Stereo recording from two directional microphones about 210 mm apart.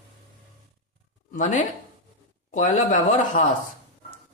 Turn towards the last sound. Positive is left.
turn(degrees=35)  # may be behind; listen again after turning